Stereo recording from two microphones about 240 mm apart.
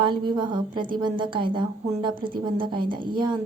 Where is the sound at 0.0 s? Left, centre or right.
Centre.